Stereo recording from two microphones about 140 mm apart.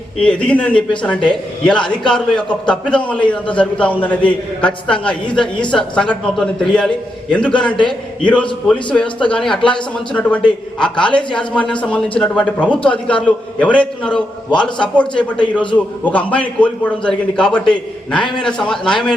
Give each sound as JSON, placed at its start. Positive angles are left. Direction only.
{"t": 0.2, "sound": "a man's voice", "side_deg": 10}
{"t": 11.1, "sound": "speech", "side_deg": 35}
{"t": 11.3, "sound": "a man's voice", "side_deg": 10}